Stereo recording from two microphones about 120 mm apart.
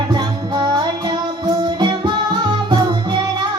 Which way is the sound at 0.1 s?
40° right (ahead or behind).